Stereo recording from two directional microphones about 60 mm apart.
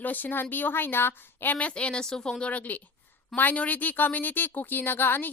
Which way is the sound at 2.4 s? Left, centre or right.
Left.